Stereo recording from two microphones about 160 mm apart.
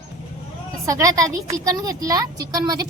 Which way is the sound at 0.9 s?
20° right (ahead or behind).